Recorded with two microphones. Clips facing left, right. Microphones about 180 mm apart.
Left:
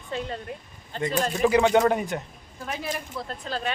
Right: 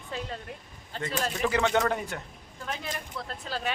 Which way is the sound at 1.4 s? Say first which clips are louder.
Left 7 dB; 15° left (ahead or behind).